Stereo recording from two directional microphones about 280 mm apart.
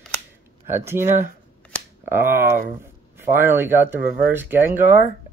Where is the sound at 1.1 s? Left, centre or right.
Right.